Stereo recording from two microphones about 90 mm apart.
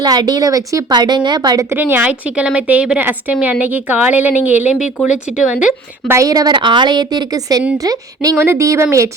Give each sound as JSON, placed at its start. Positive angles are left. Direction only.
{"t": 0.0, "sound": "a woman's voice", "side_deg": -50}
{"t": 0.9, "sound": "a woman's voice", "side_deg": -55}
{"t": 1.7, "sound": "a woman's voice", "side_deg": -25}
{"t": 6.1, "sound": "a woman's voice", "side_deg": -35}
{"t": 8.4, "sound": "speech", "side_deg": -30}